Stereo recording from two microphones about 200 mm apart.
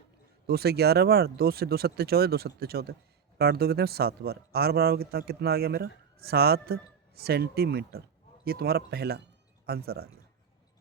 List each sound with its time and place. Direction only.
0.4 s speech: 50° right (ahead or behind)